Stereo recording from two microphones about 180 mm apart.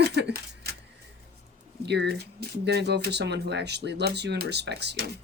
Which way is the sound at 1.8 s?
70° right (ahead or behind).